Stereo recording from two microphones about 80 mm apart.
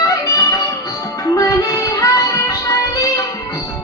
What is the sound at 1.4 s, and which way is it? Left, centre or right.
Music, left.